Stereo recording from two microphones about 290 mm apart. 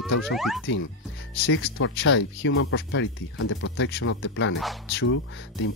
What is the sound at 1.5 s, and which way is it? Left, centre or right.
Speech, left.